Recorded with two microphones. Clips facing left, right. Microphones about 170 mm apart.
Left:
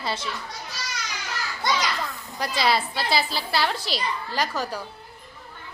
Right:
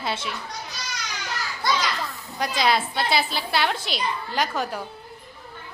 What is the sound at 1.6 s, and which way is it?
Speech, 20° left (ahead or behind).